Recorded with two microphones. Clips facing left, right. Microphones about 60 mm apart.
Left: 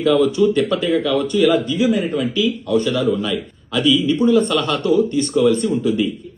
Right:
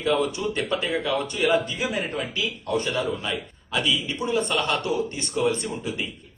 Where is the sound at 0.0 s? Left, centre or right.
Right.